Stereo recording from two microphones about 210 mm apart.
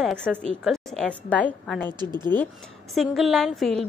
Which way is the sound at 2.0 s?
20° right (ahead or behind).